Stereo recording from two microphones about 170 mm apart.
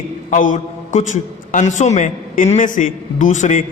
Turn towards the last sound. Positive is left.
turn(degrees=45)  # may be behind; listen again after turning